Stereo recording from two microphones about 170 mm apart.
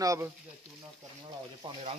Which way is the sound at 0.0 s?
20° right (ahead or behind).